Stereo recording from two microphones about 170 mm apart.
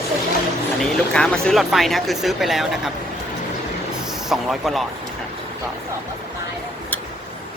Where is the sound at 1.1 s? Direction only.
5° left (ahead or behind).